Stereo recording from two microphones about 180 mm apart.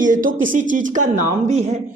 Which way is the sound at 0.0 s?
50° right (ahead or behind).